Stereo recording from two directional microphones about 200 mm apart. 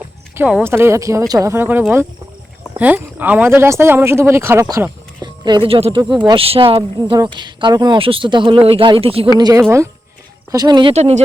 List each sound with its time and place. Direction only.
0.3 s speech: 10° right (ahead or behind)
5.2 s speech: 20° right (ahead or behind)
9.4 s speech: 15° right (ahead or behind); by 11.2 s 30° right (ahead or behind)